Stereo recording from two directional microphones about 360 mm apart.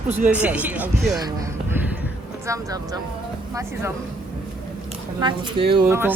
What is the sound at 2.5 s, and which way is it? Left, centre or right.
Speech, centre.